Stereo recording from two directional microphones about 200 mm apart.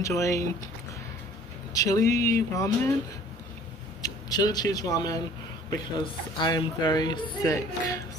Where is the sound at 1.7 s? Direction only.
15° left (ahead or behind).